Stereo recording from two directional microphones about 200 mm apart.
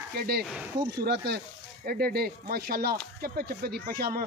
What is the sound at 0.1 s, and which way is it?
Speech, 50° right (ahead or behind).